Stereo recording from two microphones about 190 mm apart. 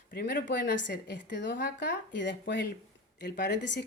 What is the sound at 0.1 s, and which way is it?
A woman's voice, 60° left (ahead or behind).